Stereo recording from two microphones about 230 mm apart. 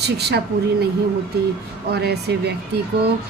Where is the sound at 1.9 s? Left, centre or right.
Right.